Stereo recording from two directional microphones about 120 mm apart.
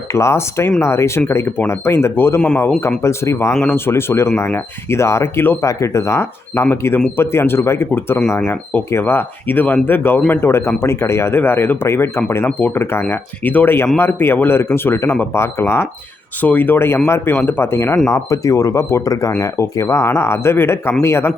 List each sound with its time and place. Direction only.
0.1 s speech: 25° left (ahead or behind)
3.0 s speech: 20° left (ahead or behind)
3.5 s speech: 10° left (ahead or behind)